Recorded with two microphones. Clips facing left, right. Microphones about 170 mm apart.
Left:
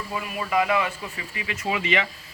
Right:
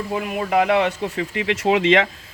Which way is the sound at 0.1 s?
65° right (ahead or behind).